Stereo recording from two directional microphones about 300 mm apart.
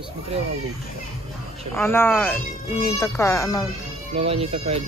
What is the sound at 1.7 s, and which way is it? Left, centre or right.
Speech, centre.